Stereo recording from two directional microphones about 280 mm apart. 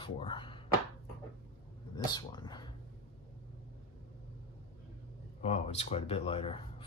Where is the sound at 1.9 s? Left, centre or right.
Centre.